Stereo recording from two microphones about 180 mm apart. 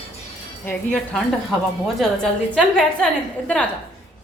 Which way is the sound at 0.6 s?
5° left (ahead or behind).